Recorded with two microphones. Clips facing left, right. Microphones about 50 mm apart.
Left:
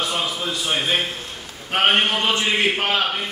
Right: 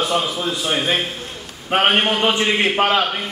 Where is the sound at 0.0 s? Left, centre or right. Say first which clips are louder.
Right 4 dB; centre.